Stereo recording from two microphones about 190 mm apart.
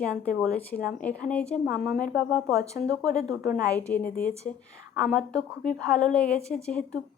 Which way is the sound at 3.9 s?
10° left (ahead or behind).